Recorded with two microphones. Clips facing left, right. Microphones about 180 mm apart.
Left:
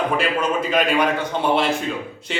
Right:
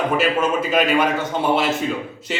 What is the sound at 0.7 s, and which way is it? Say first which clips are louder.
Speech: even; 5° right (ahead or behind).